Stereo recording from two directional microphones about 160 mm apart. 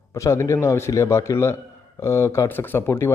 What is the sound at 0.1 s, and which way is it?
A man's voice, 20° left (ahead or behind).